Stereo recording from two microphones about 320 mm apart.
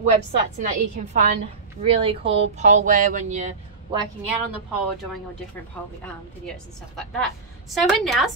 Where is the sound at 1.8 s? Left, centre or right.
Centre.